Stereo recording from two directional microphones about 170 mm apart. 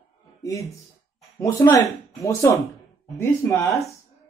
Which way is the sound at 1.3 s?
20° left (ahead or behind).